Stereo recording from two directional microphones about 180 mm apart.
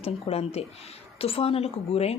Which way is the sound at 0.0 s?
35° left (ahead or behind).